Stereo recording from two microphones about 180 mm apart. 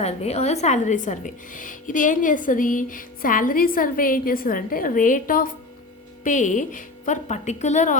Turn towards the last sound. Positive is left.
turn(degrees=40)  # may be behind; listen again after turning